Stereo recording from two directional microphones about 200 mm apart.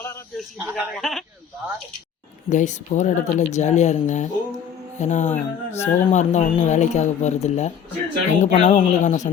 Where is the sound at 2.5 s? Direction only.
35° left (ahead or behind).